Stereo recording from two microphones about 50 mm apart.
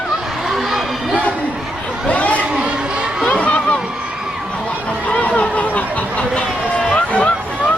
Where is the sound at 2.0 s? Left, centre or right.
Left.